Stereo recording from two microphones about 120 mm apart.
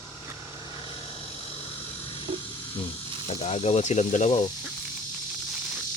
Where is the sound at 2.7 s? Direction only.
45° left (ahead or behind).